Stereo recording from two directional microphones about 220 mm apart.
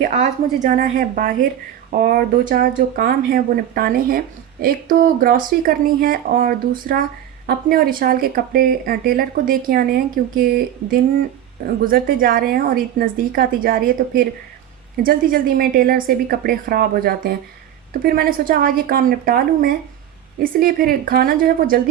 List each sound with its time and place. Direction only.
0.0 s a woman's voice: 35° right (ahead or behind)